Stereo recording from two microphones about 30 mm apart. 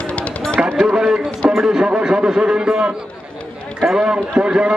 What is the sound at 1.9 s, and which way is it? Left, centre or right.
Speech, right.